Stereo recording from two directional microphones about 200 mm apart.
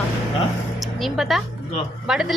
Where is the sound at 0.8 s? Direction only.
Centre (ahead or behind).